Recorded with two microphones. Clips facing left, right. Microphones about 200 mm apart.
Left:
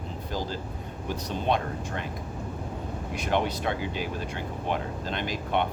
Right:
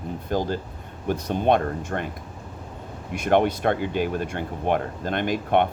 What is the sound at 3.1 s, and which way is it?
Speech, 55° right (ahead or behind).